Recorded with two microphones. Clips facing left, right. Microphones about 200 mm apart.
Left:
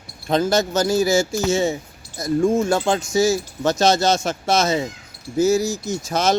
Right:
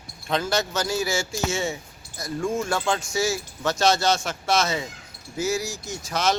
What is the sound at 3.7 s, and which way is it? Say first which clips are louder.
A man's voice: left 3 dB; 40° left (ahead or behind).